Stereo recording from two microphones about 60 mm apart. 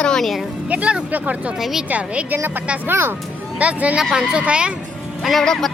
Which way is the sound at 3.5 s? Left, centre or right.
Right.